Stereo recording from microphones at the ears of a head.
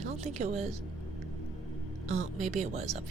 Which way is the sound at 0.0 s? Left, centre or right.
Right.